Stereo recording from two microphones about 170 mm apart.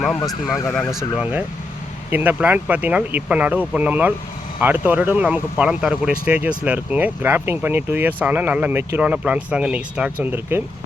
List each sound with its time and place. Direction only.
0.3 s speech: centre (ahead or behind)